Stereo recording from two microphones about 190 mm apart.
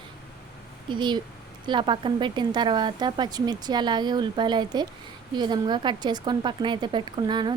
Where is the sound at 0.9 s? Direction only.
25° right (ahead or behind).